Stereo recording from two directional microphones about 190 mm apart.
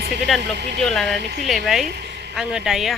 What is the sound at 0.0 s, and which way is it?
Speech, 60° right (ahead or behind).